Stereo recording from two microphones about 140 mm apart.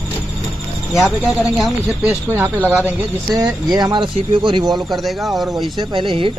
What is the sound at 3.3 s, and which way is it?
Speech, 25° right (ahead or behind).